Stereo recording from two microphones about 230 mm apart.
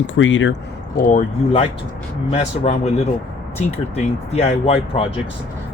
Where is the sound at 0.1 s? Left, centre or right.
Left.